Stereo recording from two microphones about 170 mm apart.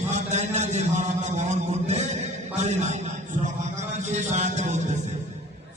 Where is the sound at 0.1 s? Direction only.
45° right (ahead or behind).